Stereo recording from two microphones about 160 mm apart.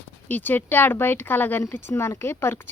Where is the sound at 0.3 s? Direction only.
10° left (ahead or behind).